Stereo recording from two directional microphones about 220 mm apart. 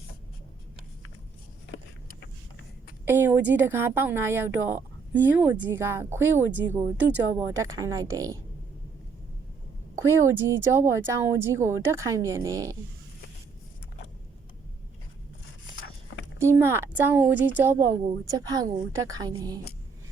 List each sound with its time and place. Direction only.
3.1 s a woman's voice: 10° right (ahead or behind)
10.0 s speech: 15° right (ahead or behind)
16.4 s speech: 10° right (ahead or behind)